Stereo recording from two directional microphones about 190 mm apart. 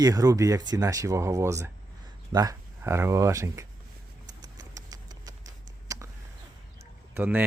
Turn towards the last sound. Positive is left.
turn(degrees=-10)  # may be behind; listen again after turning